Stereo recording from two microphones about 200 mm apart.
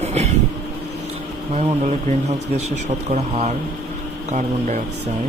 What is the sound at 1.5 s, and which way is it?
Speech, 35° right (ahead or behind).